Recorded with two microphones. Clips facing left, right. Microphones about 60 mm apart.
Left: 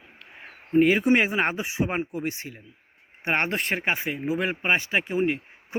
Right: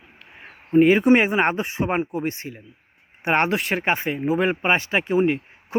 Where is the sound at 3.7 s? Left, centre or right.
Centre.